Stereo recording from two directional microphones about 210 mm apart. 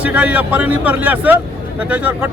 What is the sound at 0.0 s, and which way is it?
A man's voice, 5° right (ahead or behind).